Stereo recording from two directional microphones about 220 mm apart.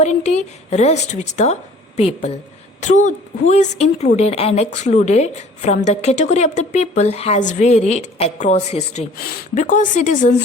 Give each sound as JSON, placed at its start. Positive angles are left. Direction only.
{"t": 0.0, "sound": "a woman's voice", "side_deg": 30}